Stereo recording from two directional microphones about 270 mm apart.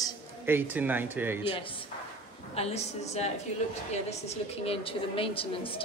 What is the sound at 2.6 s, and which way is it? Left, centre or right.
A woman's voice, left.